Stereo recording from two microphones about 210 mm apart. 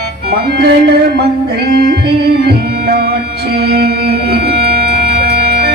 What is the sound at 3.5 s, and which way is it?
Music, 50° right (ahead or behind).